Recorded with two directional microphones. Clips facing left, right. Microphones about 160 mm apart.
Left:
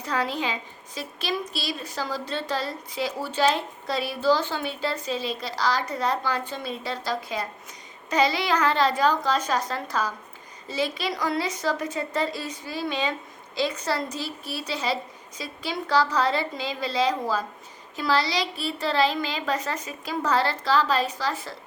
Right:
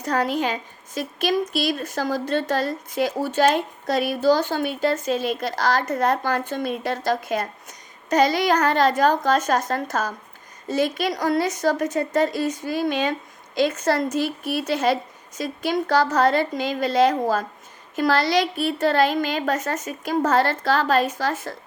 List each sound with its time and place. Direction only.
0.0 s a woman's voice: 45° right (ahead or behind)